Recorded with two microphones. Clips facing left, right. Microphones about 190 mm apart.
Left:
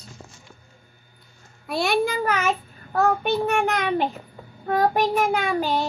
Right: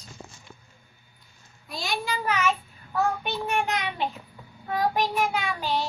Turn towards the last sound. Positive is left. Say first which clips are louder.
# left 5 dB
turn(degrees=45)  # may be behind; listen again after turning